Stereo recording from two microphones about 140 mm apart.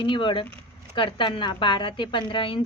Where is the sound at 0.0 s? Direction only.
35° left (ahead or behind).